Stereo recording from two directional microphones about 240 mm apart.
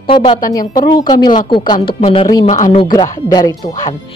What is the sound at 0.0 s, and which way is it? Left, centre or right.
A woman's voice, left.